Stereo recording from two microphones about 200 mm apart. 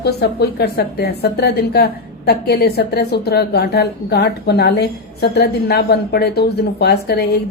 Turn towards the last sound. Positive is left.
turn(degrees=55)  # may be behind; listen again after turning